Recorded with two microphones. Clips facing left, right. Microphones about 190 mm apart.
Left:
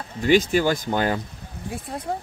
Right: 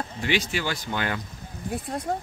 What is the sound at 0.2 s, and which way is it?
A man's voice, 45° left (ahead or behind).